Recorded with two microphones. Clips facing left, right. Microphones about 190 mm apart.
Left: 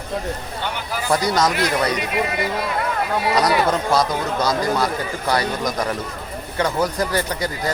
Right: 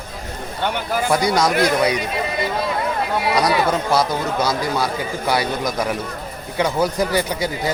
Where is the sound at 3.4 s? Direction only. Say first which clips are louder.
Even; 5° right (ahead or behind).